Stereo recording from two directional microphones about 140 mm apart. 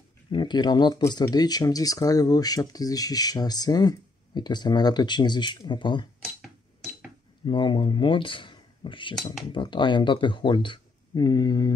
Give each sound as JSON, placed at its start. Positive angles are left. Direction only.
{"t": 0.3, "sound": "speech", "side_deg": 35}
{"t": 6.2, "sound": "a sound", "side_deg": 0}
{"t": 7.4, "sound": "speech", "side_deg": 35}